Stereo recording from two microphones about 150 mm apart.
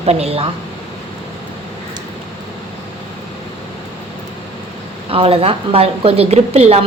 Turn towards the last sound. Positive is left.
turn(degrees=-45)  # may be behind; listen again after turning